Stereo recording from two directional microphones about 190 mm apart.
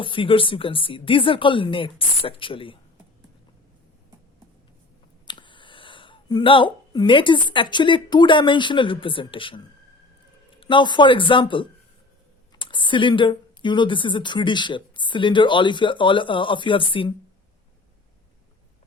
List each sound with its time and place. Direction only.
0.0 s speech: 25° left (ahead or behind)
5.2 s a sound: 25° left (ahead or behind)
6.9 s speech: 25° left (ahead or behind)